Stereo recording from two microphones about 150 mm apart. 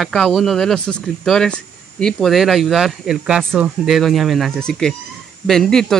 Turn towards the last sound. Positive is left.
turn(degrees=5)  # may be behind; listen again after turning